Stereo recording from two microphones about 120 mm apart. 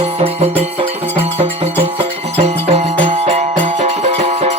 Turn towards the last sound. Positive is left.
turn(degrees=-65)  # may be behind; listen again after turning